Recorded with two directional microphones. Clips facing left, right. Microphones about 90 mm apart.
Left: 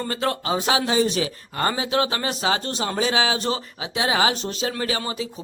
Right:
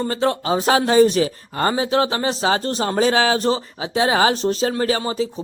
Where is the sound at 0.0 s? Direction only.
25° right (ahead or behind).